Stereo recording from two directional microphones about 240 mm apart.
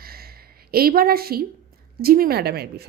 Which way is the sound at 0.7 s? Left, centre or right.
Right.